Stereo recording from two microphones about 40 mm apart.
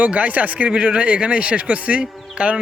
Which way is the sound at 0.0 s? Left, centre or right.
Right.